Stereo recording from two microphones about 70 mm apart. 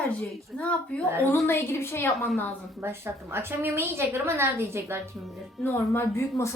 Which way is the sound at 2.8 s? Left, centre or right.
Right.